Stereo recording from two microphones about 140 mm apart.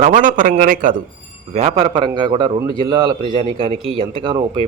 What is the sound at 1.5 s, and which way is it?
A man's voice, 50° right (ahead or behind).